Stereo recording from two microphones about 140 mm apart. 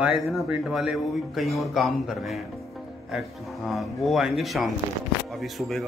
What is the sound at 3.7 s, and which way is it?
A man's voice, centre (ahead or behind).